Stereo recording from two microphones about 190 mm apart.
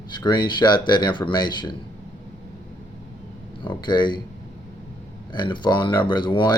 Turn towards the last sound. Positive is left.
turn(degrees=25)  # may be behind; listen again after turning